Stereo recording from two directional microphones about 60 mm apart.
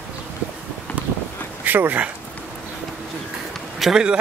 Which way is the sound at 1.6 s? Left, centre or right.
Right.